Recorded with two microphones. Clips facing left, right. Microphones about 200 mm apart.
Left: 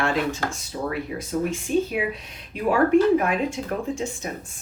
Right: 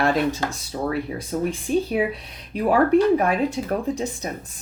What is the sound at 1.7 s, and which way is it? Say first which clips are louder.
Speech: even; 35° right (ahead or behind).